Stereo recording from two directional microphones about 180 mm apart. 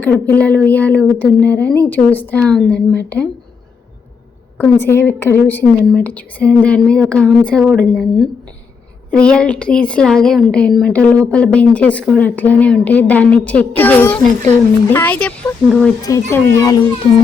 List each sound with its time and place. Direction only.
0.0 s a woman's voice: 10° left (ahead or behind)
4.5 s a woman's voice: 10° left (ahead or behind)
16.0 s speech: 20° left (ahead or behind)